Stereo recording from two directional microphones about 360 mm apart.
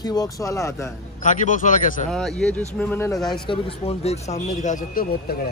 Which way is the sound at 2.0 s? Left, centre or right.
Centre.